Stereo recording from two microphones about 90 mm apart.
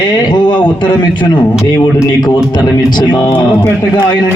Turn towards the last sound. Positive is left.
turn(degrees=55)  # may be behind; listen again after turning